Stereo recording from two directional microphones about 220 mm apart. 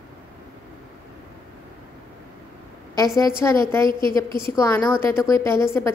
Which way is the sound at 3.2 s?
15° left (ahead or behind).